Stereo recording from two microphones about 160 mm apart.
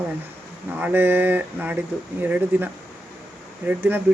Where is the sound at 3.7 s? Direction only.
10° right (ahead or behind).